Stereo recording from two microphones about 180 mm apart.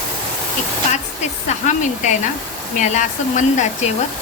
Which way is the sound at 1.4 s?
40° left (ahead or behind).